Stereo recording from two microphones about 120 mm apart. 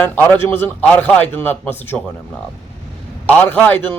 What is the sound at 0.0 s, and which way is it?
A man's voice, 15° left (ahead or behind).